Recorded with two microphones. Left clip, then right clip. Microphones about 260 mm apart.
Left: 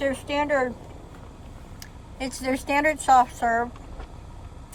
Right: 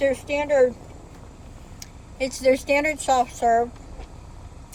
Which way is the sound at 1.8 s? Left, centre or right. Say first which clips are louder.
Right 6 dB; left.